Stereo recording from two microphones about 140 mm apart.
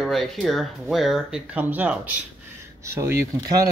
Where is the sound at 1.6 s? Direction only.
10° right (ahead or behind).